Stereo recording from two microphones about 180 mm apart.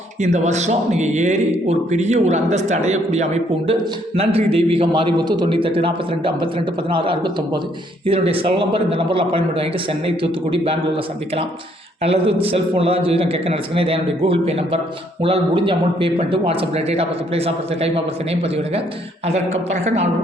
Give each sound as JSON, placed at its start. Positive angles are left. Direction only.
{"t": 0.2, "sound": "a man's voice", "side_deg": -40}